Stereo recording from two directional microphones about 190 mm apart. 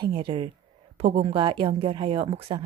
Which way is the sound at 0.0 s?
25° right (ahead or behind).